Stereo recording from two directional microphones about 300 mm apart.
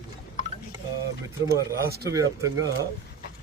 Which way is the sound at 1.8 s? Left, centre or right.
Right.